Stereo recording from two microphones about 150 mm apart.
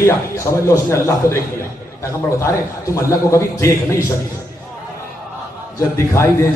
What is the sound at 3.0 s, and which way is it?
A man's voice, 20° left (ahead or behind).